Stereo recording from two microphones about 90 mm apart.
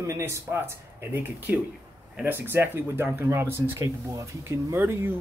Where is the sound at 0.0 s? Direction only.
35° right (ahead or behind).